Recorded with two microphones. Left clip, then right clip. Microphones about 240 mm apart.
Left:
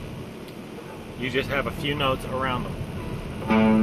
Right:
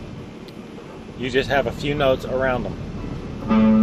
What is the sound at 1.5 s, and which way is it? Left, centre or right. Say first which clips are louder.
Speech: right 5 dB; centre.